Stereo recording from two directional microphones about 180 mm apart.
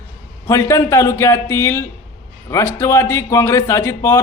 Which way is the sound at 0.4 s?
20° left (ahead or behind).